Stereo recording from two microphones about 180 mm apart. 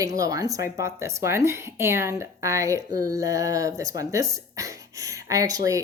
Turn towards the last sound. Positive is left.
turn(degrees=-20)  # may be behind; listen again after turning